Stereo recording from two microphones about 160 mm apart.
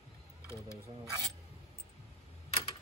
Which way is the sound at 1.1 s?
20° right (ahead or behind).